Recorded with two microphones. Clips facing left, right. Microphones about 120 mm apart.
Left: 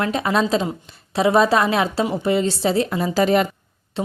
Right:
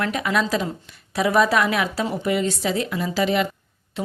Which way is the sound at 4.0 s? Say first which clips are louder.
Left 3 dB; 30° left (ahead or behind).